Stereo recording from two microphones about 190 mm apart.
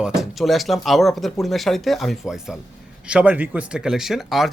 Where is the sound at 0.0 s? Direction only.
Centre (ahead or behind).